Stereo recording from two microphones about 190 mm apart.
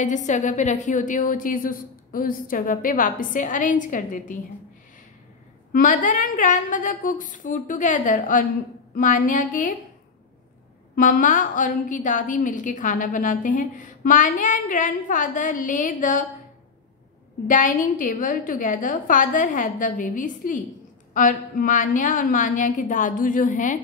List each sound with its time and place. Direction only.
0.0 s a woman's voice: 40° left (ahead or behind)
5.7 s a woman's voice: 45° left (ahead or behind)
11.0 s a woman's voice: 45° left (ahead or behind)
17.5 s a woman's voice: 45° left (ahead or behind)